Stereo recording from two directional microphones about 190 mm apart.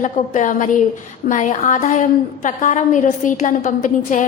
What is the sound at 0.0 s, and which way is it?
A woman's voice, 40° left (ahead or behind).